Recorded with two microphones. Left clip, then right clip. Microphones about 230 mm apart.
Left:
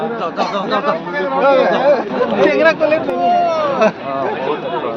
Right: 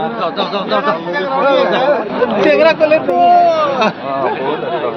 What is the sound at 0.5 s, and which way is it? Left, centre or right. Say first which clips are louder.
Speech: right 3 dB; right.